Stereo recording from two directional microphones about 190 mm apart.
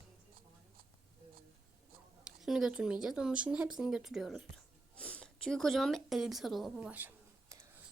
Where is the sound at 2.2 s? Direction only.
Centre (ahead or behind).